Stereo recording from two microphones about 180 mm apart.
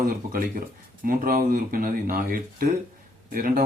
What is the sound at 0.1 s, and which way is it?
A man's voice, 50° right (ahead or behind).